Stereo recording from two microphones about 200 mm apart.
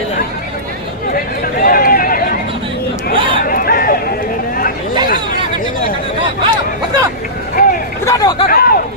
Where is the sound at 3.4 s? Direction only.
45° left (ahead or behind).